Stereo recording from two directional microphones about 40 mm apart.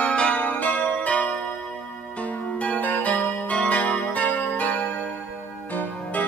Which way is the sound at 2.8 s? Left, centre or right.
Left.